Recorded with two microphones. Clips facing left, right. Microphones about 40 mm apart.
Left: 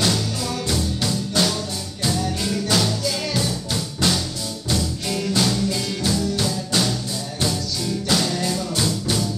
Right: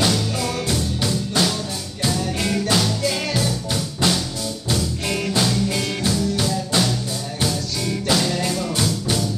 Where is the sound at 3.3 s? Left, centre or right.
Centre.